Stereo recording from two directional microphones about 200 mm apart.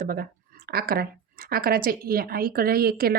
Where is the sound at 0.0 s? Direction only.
45° right (ahead or behind).